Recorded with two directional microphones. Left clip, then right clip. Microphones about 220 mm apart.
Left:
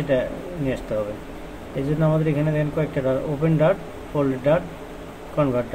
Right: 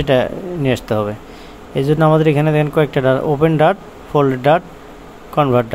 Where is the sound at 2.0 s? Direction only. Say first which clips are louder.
Right 9 dB; 55° right (ahead or behind).